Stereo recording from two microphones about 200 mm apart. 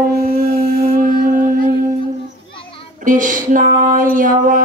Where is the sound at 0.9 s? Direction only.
45° right (ahead or behind).